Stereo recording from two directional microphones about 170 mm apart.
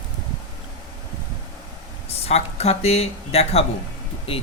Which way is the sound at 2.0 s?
40° left (ahead or behind).